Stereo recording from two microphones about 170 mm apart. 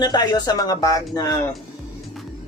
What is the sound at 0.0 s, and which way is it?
Speech, 25° left (ahead or behind).